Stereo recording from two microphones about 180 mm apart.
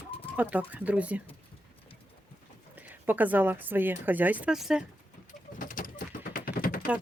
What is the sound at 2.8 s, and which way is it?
A woman's voice, 10° right (ahead or behind).